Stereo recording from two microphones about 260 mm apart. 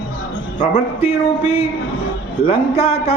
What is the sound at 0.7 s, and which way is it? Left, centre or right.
A man's voice, left.